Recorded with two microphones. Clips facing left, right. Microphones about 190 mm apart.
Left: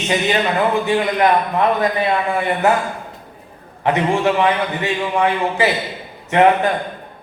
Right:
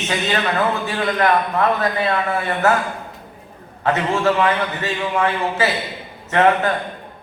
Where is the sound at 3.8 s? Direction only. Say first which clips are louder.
Left 2 dB; 15° left (ahead or behind).